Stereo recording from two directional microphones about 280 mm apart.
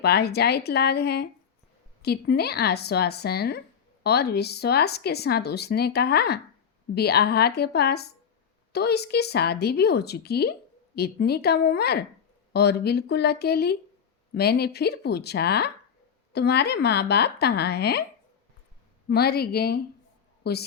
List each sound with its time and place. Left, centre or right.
0.0 s speech: left
19.0 s a woman's voice: left